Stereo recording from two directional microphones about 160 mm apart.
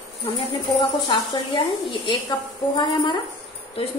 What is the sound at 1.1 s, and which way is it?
Speech, 30° left (ahead or behind).